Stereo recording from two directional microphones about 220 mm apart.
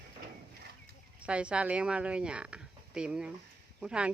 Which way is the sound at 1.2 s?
5° right (ahead or behind).